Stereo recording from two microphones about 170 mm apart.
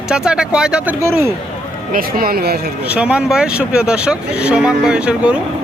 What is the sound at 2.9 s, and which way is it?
Speech, 5° right (ahead or behind).